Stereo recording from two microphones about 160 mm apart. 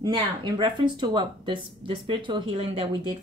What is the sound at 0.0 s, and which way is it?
A woman's voice, 30° right (ahead or behind).